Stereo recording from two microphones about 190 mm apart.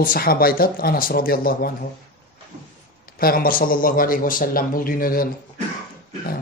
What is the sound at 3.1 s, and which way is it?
A man's voice, 50° left (ahead or behind).